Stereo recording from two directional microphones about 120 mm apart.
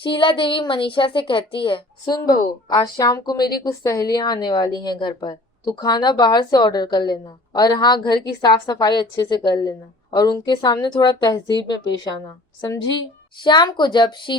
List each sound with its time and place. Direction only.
0.0 s a woman's voice: 45° left (ahead or behind)
13.4 s a woman's voice: 40° left (ahead or behind)